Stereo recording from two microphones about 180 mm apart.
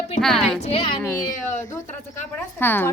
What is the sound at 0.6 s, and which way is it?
Speech, 35° left (ahead or behind).